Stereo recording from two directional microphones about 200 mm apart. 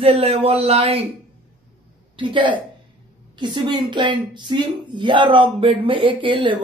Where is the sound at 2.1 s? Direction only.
25° right (ahead or behind).